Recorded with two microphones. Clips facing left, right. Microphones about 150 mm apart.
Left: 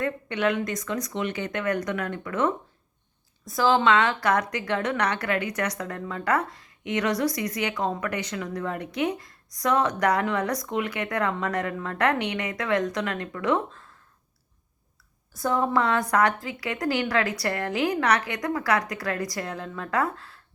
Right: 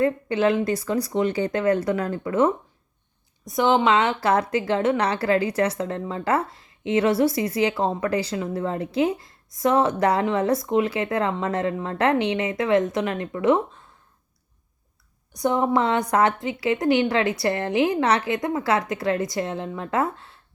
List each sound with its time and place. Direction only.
0.0 s speech: 30° right (ahead or behind)
3.5 s a woman's voice: 20° right (ahead or behind)
15.4 s a woman's voice: 20° right (ahead or behind)